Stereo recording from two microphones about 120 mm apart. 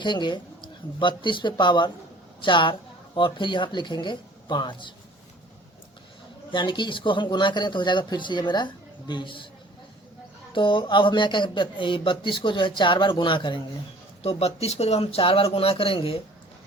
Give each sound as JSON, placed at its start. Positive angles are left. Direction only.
{"t": 0.0, "sound": "speech", "side_deg": 40}
{"t": 6.5, "sound": "speech", "side_deg": 40}
{"t": 10.5, "sound": "speech", "side_deg": 45}
{"t": 14.2, "sound": "speech", "side_deg": 55}